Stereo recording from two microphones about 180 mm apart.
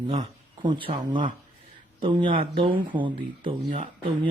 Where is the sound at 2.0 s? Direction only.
30° right (ahead or behind).